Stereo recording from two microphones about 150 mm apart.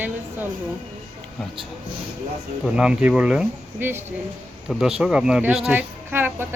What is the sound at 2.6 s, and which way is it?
Speech, 5° right (ahead or behind).